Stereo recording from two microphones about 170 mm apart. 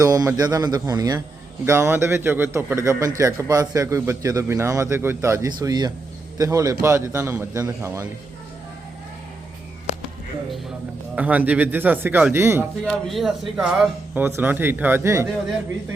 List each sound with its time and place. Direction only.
0.0 s a man's voice: 20° right (ahead or behind)
11.1 s speech: 10° right (ahead or behind)
12.8 s speech: 5° left (ahead or behind); by 15.3 s 15° right (ahead or behind)